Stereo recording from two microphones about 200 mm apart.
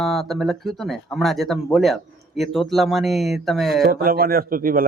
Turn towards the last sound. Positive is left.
turn(degrees=-45)  # may be behind; listen again after turning